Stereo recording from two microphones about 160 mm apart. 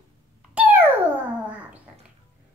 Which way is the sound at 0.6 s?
10° right (ahead or behind).